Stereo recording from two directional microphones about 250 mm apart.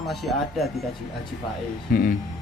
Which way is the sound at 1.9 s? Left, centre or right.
Left.